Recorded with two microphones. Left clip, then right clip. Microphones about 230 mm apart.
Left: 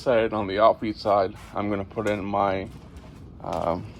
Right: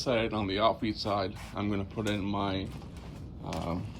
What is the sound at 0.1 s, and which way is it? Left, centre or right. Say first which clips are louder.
Speech: left 8 dB; left.